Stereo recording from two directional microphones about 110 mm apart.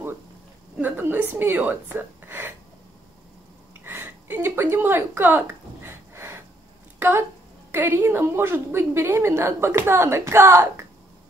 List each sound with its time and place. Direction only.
0.7 s speech: 15° right (ahead or behind)
3.8 s a sound: 20° right (ahead or behind)
7.0 s a woman's voice: 20° right (ahead or behind)